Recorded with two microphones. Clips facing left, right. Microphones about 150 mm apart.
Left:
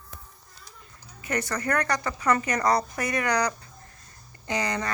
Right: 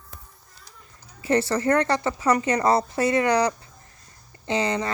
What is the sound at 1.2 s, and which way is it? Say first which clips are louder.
A woman's voice: right 7 dB; 30° right (ahead or behind).